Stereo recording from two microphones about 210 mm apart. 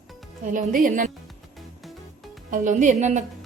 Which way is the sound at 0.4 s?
40° right (ahead or behind).